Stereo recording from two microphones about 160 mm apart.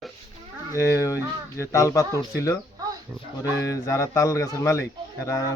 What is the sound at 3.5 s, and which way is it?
A woman's voice, 20° left (ahead or behind).